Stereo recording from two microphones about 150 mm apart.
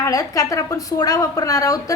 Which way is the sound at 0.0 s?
25° left (ahead or behind).